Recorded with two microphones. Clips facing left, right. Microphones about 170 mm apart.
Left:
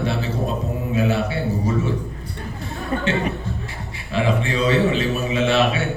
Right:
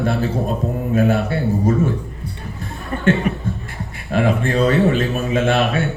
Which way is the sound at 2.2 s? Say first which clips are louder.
Right 3 dB; 90° left.